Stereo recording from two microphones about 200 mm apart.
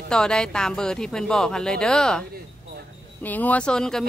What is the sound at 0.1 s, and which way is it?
Speech, 5° left (ahead or behind).